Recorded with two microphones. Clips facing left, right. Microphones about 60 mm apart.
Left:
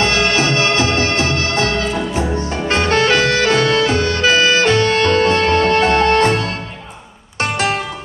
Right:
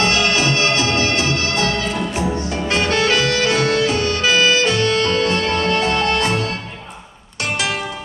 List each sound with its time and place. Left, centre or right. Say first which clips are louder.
0.0 s music: left 2 dB; left